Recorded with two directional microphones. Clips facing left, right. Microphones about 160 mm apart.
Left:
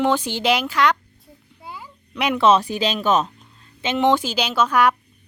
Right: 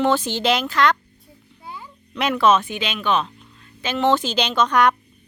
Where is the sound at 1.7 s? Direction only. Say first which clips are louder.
Even; 5° left (ahead or behind).